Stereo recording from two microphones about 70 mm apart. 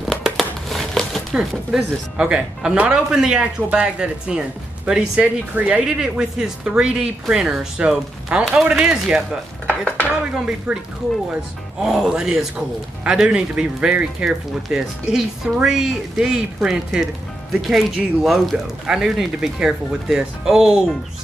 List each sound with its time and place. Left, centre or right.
0.0 s crumpling: centre
1.7 s speech: centre
2.1 s a man's voice: centre
9.7 s stir: left
10.3 s a man's voice: centre
11.8 s a man's voice: centre